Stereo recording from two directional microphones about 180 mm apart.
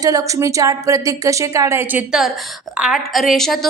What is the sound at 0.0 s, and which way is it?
A woman's voice, 20° right (ahead or behind).